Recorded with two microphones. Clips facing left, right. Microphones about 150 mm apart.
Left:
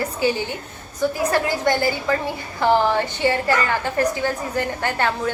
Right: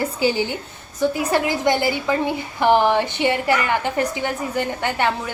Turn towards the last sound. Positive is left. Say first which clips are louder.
# right 1 dB
turn(degrees=-20)  # may be behind; listen again after turning